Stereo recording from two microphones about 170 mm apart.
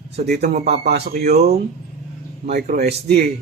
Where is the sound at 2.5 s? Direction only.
65° right (ahead or behind).